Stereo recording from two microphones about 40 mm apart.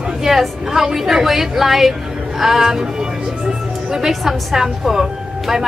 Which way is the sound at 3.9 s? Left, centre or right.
Centre.